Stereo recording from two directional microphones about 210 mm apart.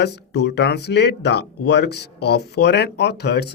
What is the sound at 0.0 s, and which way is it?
Speech, 55° left (ahead or behind).